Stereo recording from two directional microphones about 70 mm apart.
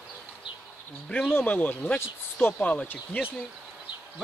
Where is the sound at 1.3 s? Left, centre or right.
Left.